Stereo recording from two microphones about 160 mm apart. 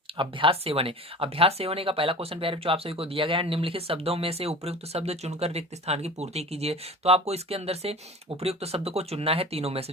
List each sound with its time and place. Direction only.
0.2 s speech: 30° right (ahead or behind)